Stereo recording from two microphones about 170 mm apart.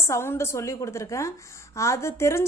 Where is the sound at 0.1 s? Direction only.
15° left (ahead or behind).